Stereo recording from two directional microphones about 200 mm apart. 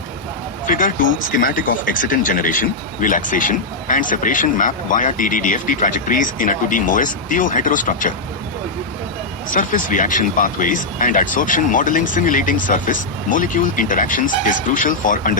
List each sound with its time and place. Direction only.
0.7 s speech: 40° left (ahead or behind)
9.5 s speech: 40° left (ahead or behind)